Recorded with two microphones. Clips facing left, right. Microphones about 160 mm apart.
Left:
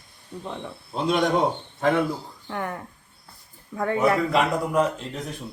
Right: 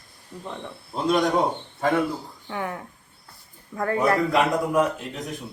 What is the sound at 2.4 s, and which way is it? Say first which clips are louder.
Speech: even; centre (ahead or behind).